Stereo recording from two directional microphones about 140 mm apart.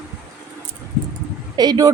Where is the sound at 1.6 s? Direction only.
25° right (ahead or behind).